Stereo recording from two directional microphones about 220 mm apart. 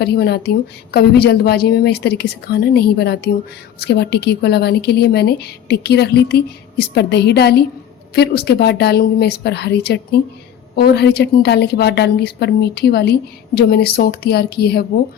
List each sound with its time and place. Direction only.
0.0 s a woman's voice: 50° left (ahead or behind)